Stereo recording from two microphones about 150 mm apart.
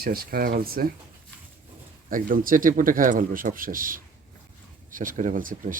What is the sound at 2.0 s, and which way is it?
Speech, 70° right (ahead or behind).